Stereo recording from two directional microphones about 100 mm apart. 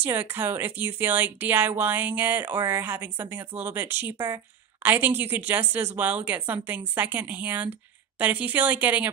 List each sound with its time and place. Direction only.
0.0 s speech: 20° right (ahead or behind)